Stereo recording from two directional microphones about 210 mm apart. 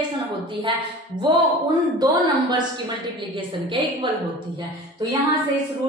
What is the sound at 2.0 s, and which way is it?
Speech, 20° right (ahead or behind).